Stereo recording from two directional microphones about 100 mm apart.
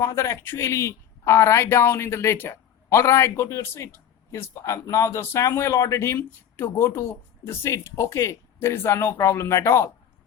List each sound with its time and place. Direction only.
0.0 s speech: 30° left (ahead or behind)